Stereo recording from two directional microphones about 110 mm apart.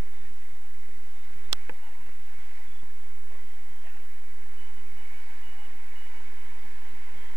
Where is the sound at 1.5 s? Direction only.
30° right (ahead or behind).